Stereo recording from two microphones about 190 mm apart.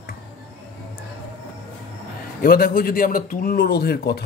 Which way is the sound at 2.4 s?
50° left (ahead or behind).